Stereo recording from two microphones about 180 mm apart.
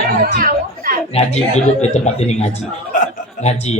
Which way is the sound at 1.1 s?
35° left (ahead or behind).